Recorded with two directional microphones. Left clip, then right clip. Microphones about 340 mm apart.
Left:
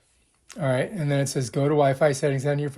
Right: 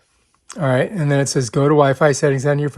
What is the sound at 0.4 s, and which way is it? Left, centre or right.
Speech, right.